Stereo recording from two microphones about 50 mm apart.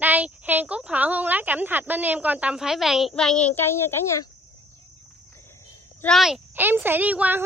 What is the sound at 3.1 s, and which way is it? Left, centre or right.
Child singing, centre.